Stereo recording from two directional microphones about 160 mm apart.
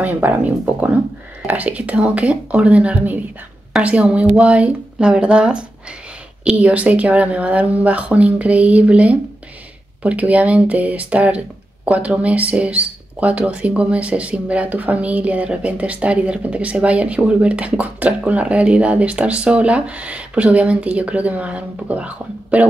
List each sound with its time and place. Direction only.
0.0 s speech: 10° right (ahead or behind)